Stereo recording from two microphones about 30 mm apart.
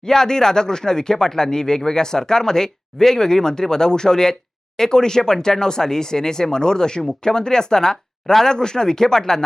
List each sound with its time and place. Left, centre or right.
0.0 s speech: centre